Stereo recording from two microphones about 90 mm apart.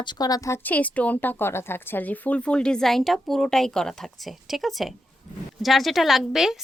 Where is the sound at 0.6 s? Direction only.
15° left (ahead or behind).